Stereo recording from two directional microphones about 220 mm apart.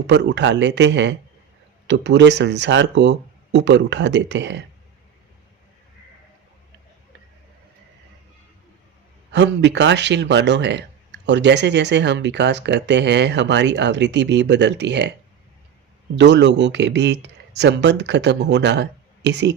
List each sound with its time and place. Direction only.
0.1 s speech: 55° right (ahead or behind)
9.3 s speech: 55° right (ahead or behind)
16.1 s speech: 55° right (ahead or behind)